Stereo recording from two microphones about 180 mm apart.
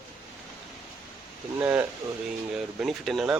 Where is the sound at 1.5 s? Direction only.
10° right (ahead or behind).